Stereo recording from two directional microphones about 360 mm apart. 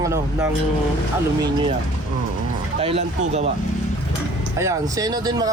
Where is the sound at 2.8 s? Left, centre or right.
Centre.